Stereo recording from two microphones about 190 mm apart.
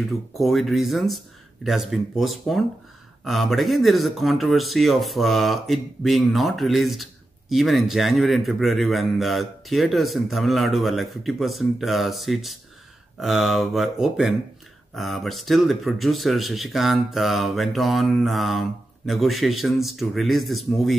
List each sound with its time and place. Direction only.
0.4 s speech: centre (ahead or behind)